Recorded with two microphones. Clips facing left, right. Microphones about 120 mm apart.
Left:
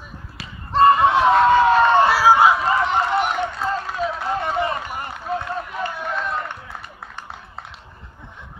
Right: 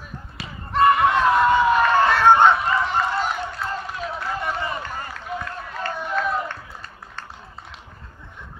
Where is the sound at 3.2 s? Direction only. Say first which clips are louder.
Left 4 dB; 70° left (ahead or behind).